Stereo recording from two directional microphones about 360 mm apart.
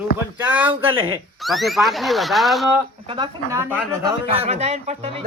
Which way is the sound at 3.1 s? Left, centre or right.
Centre.